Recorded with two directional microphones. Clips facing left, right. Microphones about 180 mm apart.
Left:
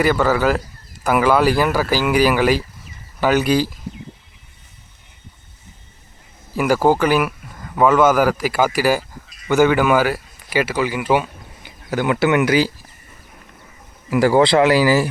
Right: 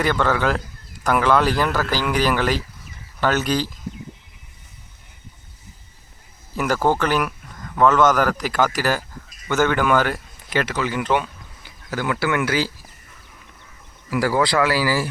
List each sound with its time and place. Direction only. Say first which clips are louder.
0.0 s speech: left 4 dB; 5° left (ahead or behind)
6.6 s speech: left 4 dB; 10° left (ahead or behind)
14.1 s speech: left 6 dB; 25° left (ahead or behind)